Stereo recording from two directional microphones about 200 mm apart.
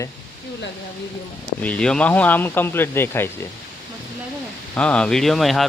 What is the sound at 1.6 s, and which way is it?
Speech, 5° left (ahead or behind).